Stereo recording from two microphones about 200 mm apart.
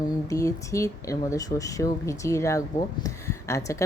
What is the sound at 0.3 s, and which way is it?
Speech, 15° left (ahead or behind).